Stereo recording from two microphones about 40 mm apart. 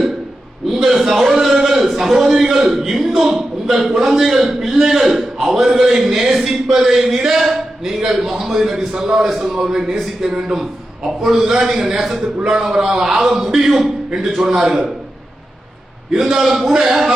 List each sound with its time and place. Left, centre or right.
0.7 s a sound: centre
1.8 s a man's voice: centre
16.1 s speech: centre